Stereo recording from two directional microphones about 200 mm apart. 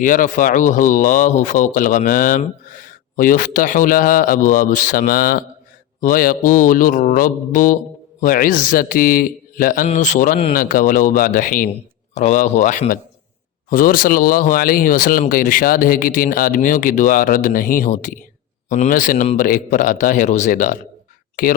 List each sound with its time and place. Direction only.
0.0 s speech: 40° left (ahead or behind)